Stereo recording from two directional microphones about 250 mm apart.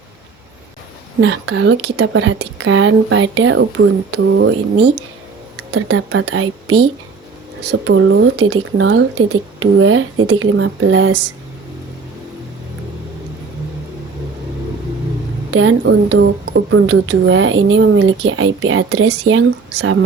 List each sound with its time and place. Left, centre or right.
1.2 s a woman's voice: right
5.5 s a woman's voice: right
15.5 s a woman's voice: right
19.0 s a woman's voice: right